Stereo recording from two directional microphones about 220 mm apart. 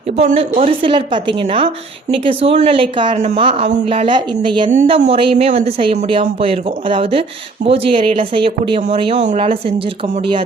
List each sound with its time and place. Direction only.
0.2 s speech: 30° right (ahead or behind)